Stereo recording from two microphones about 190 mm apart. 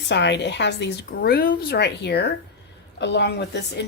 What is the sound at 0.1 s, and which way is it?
Speech, 65° left (ahead or behind).